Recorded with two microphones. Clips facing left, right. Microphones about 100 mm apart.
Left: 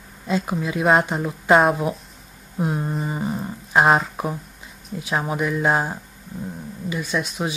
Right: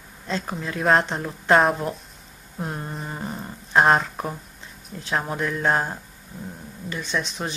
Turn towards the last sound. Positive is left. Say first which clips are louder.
# left 3 dB
turn(degrees=5)  # may be behind; listen again after turning